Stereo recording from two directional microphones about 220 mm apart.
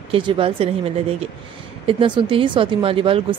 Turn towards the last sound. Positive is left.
turn(degrees=-25)  # may be behind; listen again after turning